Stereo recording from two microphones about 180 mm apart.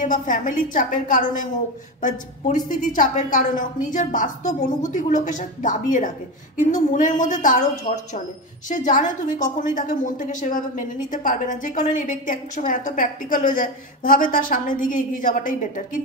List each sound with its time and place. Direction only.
0.0 s a woman's voice: 45° left (ahead or behind)